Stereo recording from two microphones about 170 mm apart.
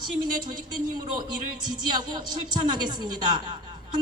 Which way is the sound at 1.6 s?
25° right (ahead or behind).